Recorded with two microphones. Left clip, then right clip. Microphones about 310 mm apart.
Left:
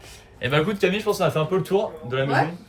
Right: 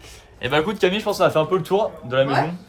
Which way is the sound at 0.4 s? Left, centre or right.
Centre.